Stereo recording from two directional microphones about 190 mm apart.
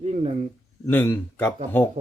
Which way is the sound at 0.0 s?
35° right (ahead or behind).